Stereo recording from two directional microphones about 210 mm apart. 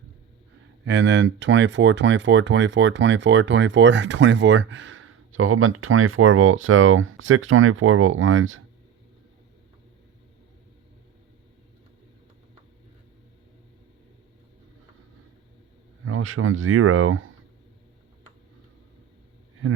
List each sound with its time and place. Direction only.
0.9 s speech: 55° right (ahead or behind); by 8.6 s 70° right (ahead or behind)
16.0 s speech: 75° right (ahead or behind)